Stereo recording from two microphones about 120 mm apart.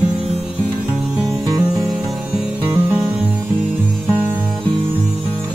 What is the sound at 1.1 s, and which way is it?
Music, 20° right (ahead or behind).